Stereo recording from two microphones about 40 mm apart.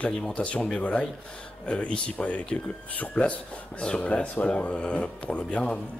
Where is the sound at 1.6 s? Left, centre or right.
Left.